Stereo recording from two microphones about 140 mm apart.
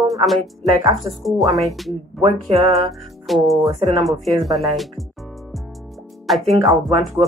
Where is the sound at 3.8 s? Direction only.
30° right (ahead or behind).